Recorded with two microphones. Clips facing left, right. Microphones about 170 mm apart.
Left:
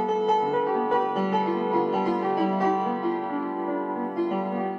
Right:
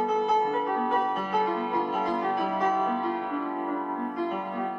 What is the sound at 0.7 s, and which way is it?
Music, 10° left (ahead or behind).